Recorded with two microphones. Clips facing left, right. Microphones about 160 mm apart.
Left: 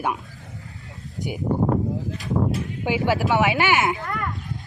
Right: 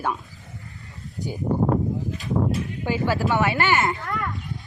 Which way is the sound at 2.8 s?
15° left (ahead or behind).